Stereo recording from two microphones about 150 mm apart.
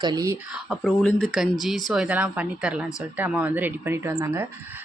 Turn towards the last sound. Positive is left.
turn(degrees=-20)  # may be behind; listen again after turning